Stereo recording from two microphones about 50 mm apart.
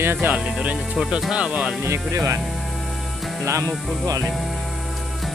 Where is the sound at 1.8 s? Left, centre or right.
Right.